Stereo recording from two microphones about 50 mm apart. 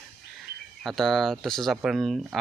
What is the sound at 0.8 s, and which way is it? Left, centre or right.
Speech, centre.